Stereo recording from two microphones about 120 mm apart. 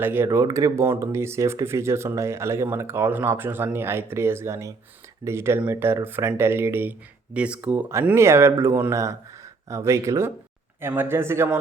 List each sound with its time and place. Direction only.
0.0 s speech: 20° right (ahead or behind)
0.3 s speech: 30° right (ahead or behind)